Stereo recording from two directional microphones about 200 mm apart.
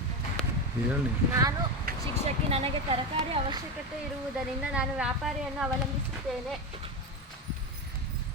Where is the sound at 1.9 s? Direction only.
50° right (ahead or behind).